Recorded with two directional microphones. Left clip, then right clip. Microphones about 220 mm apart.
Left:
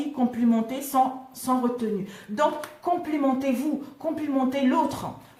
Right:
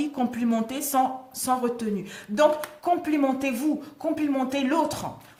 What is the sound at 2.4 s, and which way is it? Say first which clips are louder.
A woman's voice: right 4 dB; 45° right (ahead or behind).